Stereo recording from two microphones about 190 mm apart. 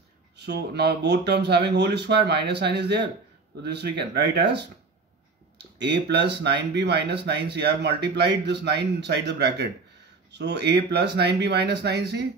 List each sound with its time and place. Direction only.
0.4 s speech: 60° right (ahead or behind)